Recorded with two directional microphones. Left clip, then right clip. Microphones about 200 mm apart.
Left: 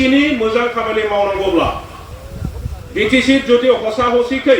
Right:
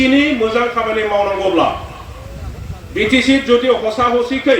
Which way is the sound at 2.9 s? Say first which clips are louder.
Even; 50° right (ahead or behind).